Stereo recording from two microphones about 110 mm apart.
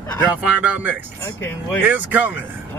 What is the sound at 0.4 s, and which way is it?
Speech, 10° right (ahead or behind).